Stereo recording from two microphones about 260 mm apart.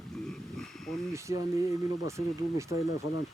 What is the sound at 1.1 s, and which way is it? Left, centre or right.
Speech, centre.